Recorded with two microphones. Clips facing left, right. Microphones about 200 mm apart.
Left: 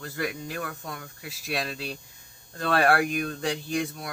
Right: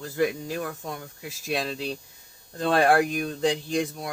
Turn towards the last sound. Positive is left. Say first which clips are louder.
# right 2 dB
turn(degrees=-20)  # may be behind; listen again after turning